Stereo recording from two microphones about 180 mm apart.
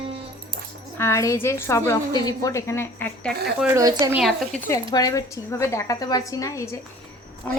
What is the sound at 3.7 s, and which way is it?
Speech, 20° right (ahead or behind).